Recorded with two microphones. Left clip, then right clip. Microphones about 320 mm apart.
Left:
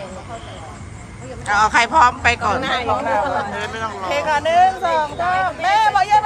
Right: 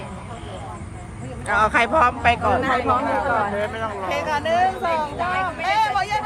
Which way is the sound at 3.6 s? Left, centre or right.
Centre.